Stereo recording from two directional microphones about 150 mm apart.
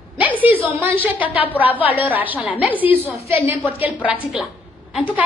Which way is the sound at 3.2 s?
45° left (ahead or behind).